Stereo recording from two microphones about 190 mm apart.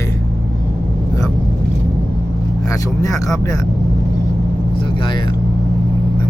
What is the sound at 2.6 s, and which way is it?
Speech, 15° left (ahead or behind).